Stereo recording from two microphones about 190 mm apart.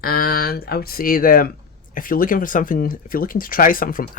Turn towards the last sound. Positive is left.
turn(degrees=45)  # may be behind; listen again after turning